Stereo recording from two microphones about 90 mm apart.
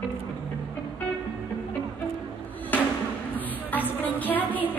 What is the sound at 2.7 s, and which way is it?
Music, 20° left (ahead or behind).